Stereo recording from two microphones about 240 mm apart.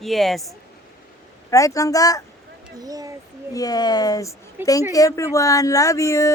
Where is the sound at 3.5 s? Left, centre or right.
Centre.